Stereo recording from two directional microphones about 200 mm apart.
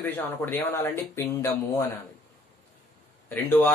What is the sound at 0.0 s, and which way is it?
Speech, 10° left (ahead or behind).